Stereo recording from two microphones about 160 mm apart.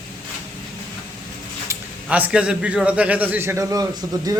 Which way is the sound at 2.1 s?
10° right (ahead or behind).